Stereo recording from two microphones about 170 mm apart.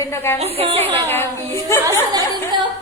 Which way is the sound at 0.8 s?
15° left (ahead or behind).